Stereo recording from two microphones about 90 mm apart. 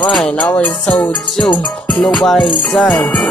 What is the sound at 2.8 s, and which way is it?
Music, 15° left (ahead or behind).